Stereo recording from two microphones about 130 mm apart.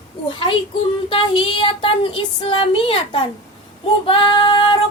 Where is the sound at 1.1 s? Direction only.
40° left (ahead or behind).